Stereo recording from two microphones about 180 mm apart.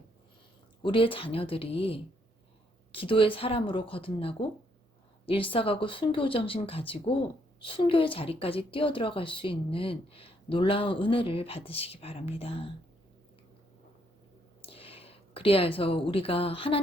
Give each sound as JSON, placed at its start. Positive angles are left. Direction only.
{"t": 0.8, "sound": "a woman's voice", "side_deg": 30}
{"t": 14.6, "sound": "speech", "side_deg": 30}